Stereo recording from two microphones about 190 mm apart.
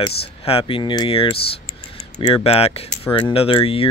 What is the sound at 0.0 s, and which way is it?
Speech, 30° left (ahead or behind).